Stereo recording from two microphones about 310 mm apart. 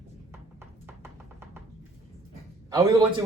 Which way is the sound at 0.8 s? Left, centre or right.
Centre.